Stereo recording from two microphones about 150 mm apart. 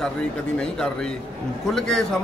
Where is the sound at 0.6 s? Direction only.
5° left (ahead or behind).